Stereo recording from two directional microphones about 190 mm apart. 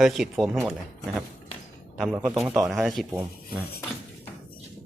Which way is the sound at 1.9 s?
Centre (ahead or behind).